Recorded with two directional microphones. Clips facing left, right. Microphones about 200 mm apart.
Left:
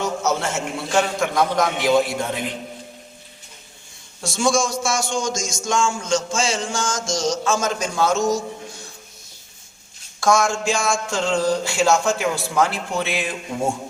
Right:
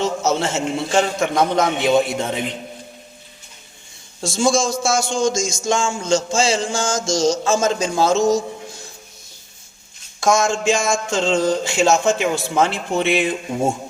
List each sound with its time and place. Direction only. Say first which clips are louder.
0.0 s a man's voice: right 3 dB; 25° right (ahead or behind)
4.2 s a man's voice: right 2 dB; 25° right (ahead or behind)
10.2 s a man's voice: right 1 dB; 20° right (ahead or behind)